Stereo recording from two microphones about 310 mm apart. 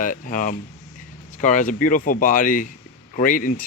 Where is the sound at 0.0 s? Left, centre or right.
Left.